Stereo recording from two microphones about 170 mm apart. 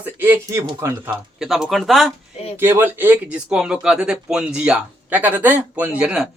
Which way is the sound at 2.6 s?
10° right (ahead or behind).